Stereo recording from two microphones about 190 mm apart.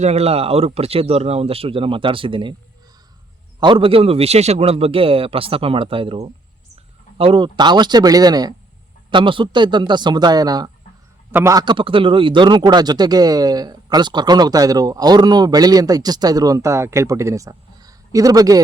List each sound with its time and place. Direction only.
0.0 s speech: 35° right (ahead or behind)
3.6 s a man's voice: 25° right (ahead or behind)